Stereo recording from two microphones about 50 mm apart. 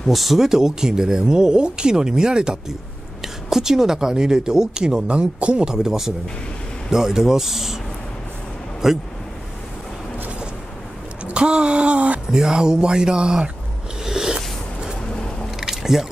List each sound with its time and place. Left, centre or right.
0.1 s speech: centre; by 5.8 s right
5.8 s speech: centre
8.8 s speech: centre
11.2 s a sound: right
12.3 s speech: centre
14.0 s zipper: centre
15.6 s boat: centre